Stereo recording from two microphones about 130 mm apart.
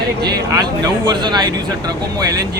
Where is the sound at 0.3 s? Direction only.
30° right (ahead or behind).